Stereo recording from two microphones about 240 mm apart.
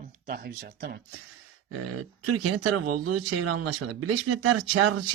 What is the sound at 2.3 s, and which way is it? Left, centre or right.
Speech, right.